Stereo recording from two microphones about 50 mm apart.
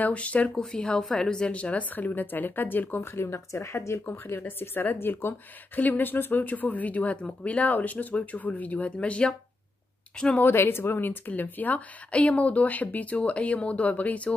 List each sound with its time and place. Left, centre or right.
0.0 s a woman's voice: left
1.5 s speech: left
3.0 s speech: left
4.0 s speech: left
4.4 s speech: left
5.8 s a woman's voice: left; by 10.4 s centre
10.4 s speech: left